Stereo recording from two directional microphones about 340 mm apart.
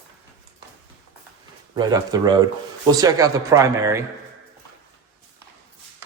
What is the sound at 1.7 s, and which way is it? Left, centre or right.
Speech, centre.